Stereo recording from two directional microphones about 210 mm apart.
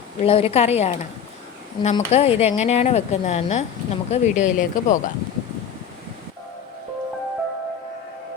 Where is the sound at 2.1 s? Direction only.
30° left (ahead or behind).